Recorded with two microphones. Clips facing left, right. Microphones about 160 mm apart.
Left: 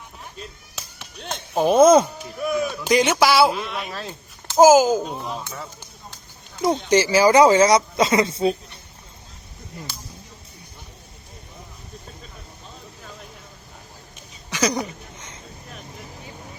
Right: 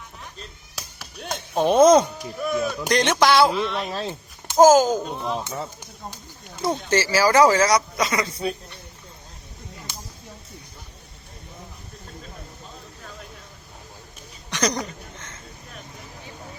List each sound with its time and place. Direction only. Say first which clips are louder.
0.8 s chop: right 1 dB; 5° right (ahead or behind)
1.5 s speech: left 1 dB; 5° left (ahead or behind)
3.8 s speech: right 4 dB; 30° right (ahead or behind)
4.5 s speech: left 1 dB; 10° left (ahead or behind)
6.6 s speech: left 4 dB; 20° left (ahead or behind)
14.5 s a sound: left 2 dB; 5° left (ahead or behind)